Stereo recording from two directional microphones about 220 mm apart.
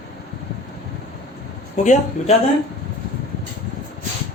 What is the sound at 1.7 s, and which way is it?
Speech, 30° left (ahead or behind).